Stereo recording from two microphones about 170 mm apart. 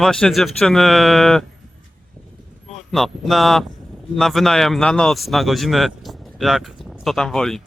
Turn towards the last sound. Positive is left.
turn(degrees=5)  # may be behind; listen again after turning